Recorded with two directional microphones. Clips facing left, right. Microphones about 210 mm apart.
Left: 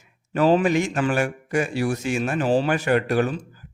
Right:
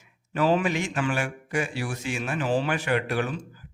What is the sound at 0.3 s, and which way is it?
A man's voice, 40° left (ahead or behind).